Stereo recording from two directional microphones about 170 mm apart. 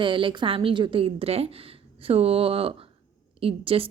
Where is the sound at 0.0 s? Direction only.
30° right (ahead or behind).